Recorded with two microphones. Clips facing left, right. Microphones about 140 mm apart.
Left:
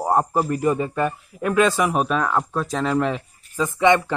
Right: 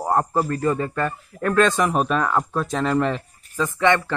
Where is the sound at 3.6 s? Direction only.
15° left (ahead or behind).